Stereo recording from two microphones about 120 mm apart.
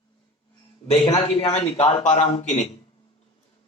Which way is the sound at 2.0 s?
80° left.